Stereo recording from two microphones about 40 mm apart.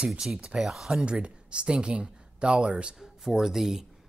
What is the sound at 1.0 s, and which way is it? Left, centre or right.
Speech, right.